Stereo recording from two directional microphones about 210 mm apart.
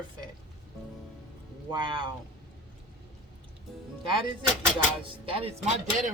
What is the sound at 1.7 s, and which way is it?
Speech, 25° right (ahead or behind).